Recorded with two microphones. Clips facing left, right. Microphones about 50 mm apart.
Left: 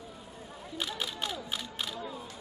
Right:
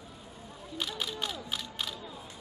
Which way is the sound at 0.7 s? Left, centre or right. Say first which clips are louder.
Even; centre.